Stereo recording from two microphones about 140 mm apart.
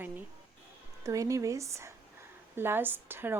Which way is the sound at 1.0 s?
25° right (ahead or behind).